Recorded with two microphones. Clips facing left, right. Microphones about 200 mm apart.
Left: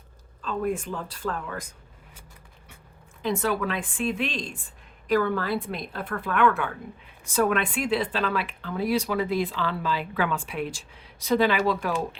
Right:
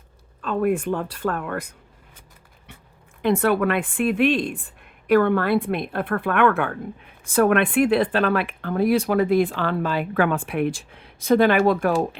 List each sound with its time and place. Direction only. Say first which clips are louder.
0.4 s a woman's voice: right 6 dB; 60° right (ahead or behind)
3.2 s a woman's voice: right 7 dB; 60° right (ahead or behind)